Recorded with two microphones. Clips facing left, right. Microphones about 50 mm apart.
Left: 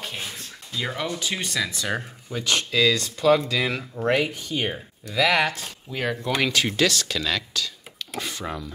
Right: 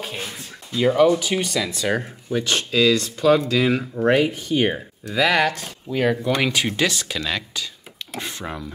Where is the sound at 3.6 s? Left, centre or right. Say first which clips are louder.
Right 5 dB; centre.